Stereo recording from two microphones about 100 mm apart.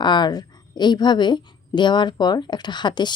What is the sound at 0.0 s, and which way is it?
A woman's voice, 50° left (ahead or behind).